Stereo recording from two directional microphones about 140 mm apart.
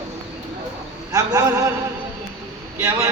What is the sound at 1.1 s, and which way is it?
Speech, 25° right (ahead or behind).